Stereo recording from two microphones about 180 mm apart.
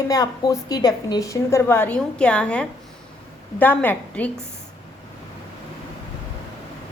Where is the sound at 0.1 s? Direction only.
20° left (ahead or behind).